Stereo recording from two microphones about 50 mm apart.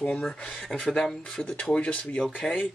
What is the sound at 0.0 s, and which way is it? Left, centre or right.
Speech, centre.